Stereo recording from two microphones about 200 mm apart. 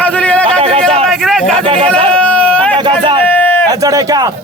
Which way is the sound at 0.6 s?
30° right (ahead or behind).